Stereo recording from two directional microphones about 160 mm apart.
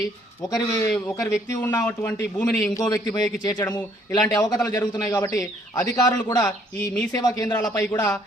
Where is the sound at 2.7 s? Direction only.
20° left (ahead or behind).